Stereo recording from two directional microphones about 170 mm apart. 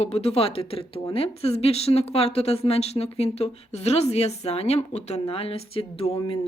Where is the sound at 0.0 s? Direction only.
35° left (ahead or behind).